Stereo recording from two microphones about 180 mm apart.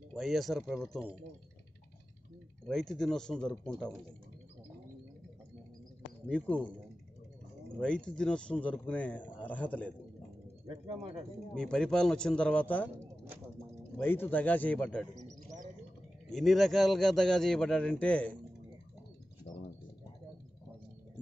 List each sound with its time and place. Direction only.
0.1 s a man's voice: centre (ahead or behind)
2.6 s a man's voice: 5° left (ahead or behind)
6.2 s a man's voice: 5° left (ahead or behind)
7.8 s a man's voice: 5° left (ahead or behind)
10.9 s speech: 35° right (ahead or behind)
11.5 s a man's voice: 5° left (ahead or behind)
13.9 s a man's voice: 10° left (ahead or behind)
16.3 s a man's voice: centre (ahead or behind)